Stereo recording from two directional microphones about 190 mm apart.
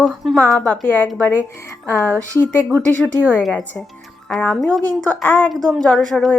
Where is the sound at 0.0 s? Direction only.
Centre (ahead or behind).